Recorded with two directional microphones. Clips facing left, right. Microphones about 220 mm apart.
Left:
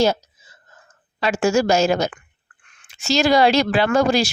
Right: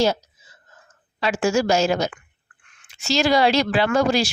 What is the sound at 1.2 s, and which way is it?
Speech, 45° left (ahead or behind).